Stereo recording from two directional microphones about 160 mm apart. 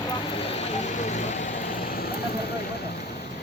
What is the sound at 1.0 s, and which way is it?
Vehicle, 45° left (ahead or behind).